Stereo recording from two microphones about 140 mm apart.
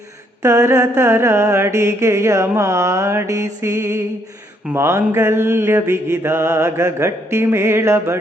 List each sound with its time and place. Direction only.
0.4 s mantra: 20° right (ahead or behind)